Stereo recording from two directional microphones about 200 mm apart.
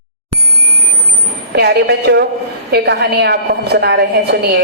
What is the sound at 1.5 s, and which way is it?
A woman's voice, 55° right (ahead or behind).